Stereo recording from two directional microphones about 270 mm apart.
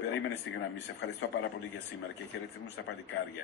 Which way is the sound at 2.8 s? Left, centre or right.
Left.